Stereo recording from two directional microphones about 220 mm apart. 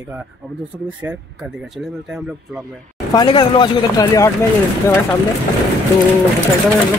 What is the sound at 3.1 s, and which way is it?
Speech, 20° left (ahead or behind).